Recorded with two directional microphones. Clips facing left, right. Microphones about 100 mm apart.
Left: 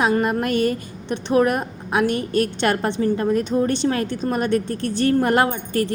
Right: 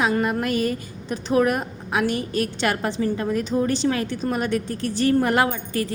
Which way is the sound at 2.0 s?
55° left (ahead or behind).